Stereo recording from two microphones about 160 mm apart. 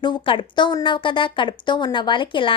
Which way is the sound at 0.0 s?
30° left (ahead or behind).